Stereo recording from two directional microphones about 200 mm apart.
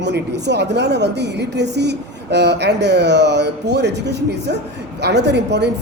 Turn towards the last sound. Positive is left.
turn(degrees=-60)  # may be behind; listen again after turning